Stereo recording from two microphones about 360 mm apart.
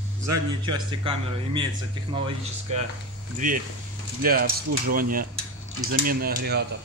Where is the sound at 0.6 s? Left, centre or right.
Centre.